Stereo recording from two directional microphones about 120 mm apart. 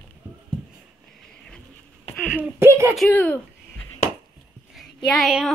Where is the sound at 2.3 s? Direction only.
15° right (ahead or behind).